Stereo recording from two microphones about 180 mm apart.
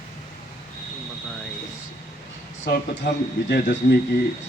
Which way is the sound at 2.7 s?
70° left (ahead or behind).